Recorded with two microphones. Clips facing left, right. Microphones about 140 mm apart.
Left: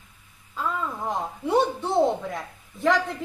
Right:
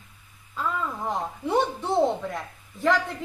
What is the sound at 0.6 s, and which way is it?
Speech, 5° left (ahead or behind).